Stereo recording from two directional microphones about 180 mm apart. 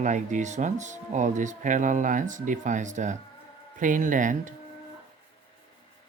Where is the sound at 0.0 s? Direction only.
45° right (ahead or behind).